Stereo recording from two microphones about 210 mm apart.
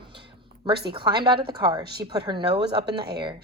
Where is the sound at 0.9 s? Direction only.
20° right (ahead or behind).